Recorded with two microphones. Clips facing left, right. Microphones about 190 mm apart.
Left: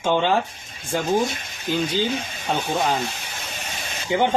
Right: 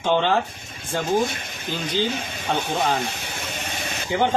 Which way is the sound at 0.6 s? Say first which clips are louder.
Right 3 dB; 55° right (ahead or behind).